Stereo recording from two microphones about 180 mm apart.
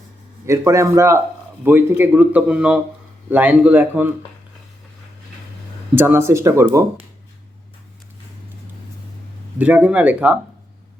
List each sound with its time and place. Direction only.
0.4 s a man's voice: 15° right (ahead or behind)
5.9 s a man's voice: 10° right (ahead or behind)
9.6 s a man's voice: 10° right (ahead or behind)